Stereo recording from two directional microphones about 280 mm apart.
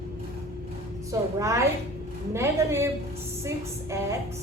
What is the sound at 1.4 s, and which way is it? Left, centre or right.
A woman's voice, centre.